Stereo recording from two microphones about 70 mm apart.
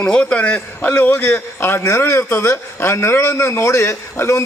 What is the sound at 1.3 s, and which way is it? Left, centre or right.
A man's voice, left.